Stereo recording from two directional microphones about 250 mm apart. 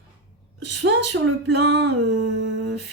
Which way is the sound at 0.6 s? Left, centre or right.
Right.